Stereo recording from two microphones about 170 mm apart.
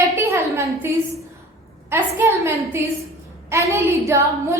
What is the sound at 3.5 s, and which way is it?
A woman's voice, 15° right (ahead or behind).